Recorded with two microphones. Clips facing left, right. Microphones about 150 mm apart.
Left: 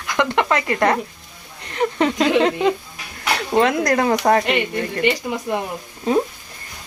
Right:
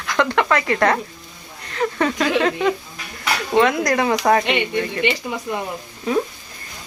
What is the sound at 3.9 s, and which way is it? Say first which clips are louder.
Speech: left 1 dB; 40° left (ahead or behind).